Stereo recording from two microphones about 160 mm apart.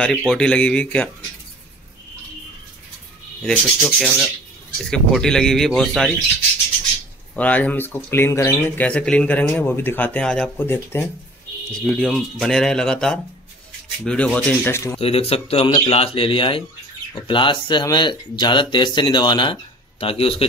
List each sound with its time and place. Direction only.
0.0 s speech: 5° left (ahead or behind)
3.4 s speech: centre (ahead or behind)
7.3 s speech: 10° left (ahead or behind)
11.7 s speech: 5° left (ahead or behind)
15.0 s speech: 35° left (ahead or behind)